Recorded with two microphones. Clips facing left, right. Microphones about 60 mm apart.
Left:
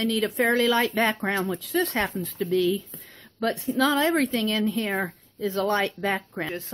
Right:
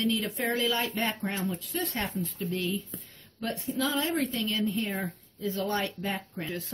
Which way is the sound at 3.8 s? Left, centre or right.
Left.